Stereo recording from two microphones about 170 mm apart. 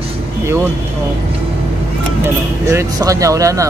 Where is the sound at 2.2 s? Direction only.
15° right (ahead or behind).